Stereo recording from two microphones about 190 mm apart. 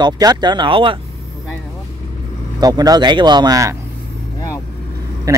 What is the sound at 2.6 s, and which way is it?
Speech, 20° right (ahead or behind).